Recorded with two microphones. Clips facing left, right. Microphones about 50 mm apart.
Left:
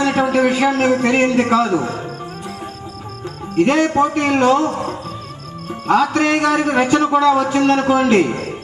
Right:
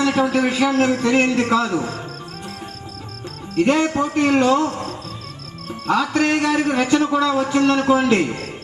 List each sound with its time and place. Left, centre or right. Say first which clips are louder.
0.0 s speech: left 3 dB; left
1.0 s a man's voice: left 2 dB; left
3.6 s a man's voice: left 3 dB; left
4.7 s music: left 5 dB; centre
5.9 s a man's voice: left 3 dB; left